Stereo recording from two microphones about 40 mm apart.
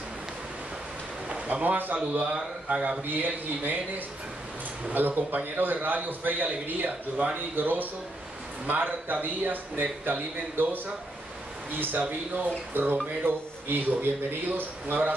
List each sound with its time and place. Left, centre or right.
1.5 s speech: right
4.9 s a man's voice: right